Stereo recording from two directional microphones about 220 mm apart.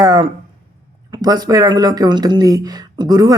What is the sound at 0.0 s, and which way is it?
Speech, 20° right (ahead or behind).